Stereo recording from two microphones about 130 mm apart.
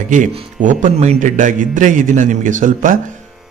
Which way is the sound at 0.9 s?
65° right (ahead or behind).